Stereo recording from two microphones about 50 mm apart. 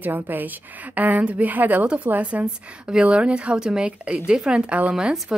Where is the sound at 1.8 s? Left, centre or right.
Right.